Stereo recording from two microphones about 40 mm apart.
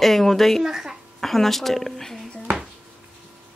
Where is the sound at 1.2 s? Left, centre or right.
Centre.